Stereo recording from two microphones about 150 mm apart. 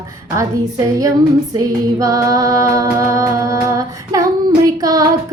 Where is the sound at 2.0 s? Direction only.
20° right (ahead or behind).